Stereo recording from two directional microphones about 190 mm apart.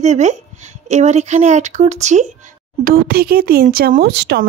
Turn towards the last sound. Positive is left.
turn(degrees=-60)  # may be behind; listen again after turning